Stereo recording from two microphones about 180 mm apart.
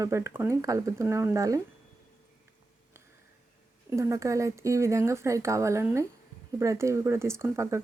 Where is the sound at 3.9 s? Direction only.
15° right (ahead or behind).